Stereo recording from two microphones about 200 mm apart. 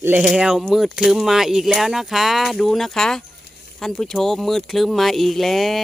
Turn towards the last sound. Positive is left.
turn(degrees=0)  # may be behind; listen again after turning